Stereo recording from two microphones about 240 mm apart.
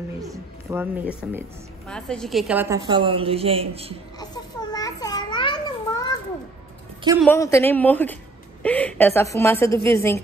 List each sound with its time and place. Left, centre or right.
0.2 s speech: centre
1.9 s a woman's voice: centre
2.9 s a woman's voice: right
4.2 s a sound: centre
7.2 s a woman's voice: centre